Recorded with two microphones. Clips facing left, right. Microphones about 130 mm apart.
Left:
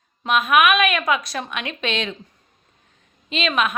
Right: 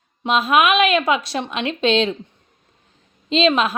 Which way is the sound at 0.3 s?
30° right (ahead or behind).